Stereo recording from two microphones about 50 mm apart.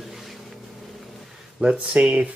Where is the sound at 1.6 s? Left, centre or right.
Centre.